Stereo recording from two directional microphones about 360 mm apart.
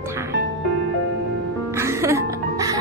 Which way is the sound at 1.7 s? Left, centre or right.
Centre.